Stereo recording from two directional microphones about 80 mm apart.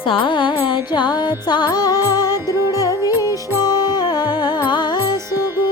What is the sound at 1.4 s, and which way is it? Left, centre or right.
Music, left.